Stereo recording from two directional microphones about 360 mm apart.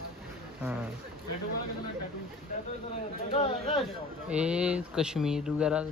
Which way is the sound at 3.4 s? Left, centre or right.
Centre.